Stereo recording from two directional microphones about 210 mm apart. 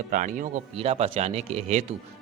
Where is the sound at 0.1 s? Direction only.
40° right (ahead or behind).